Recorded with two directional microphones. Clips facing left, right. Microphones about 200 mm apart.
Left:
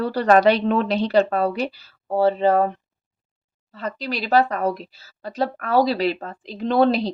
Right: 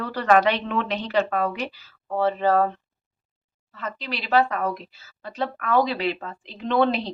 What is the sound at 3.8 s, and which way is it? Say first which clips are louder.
Speech: left 5 dB; 35° left (ahead or behind).